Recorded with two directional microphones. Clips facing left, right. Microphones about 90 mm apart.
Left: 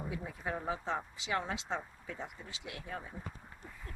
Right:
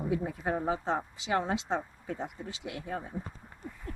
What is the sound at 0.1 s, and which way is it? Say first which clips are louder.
Speech: right 11 dB; 45° right (ahead or behind).